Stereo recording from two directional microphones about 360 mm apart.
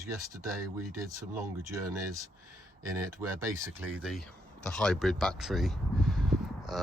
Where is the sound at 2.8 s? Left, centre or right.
Centre.